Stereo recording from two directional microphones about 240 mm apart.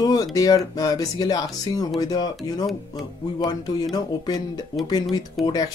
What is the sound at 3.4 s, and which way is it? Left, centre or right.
Speech, centre.